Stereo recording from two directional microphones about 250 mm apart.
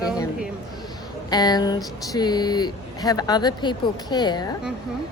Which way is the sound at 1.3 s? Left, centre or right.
Centre.